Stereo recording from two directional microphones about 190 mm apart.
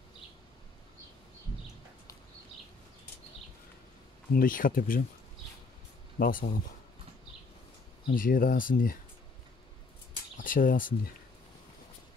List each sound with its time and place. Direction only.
4.4 s speech: 45° left (ahead or behind)
6.1 s speech: 50° left (ahead or behind)
8.1 s speech: 50° left (ahead or behind)
10.4 s speech: 45° left (ahead or behind)